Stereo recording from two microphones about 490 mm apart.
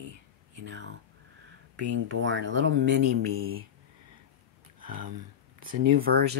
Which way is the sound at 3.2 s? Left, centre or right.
Centre.